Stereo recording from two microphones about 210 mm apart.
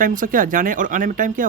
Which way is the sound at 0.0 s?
40° right (ahead or behind).